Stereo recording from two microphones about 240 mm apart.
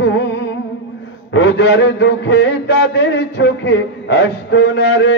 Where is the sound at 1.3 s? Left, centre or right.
Left.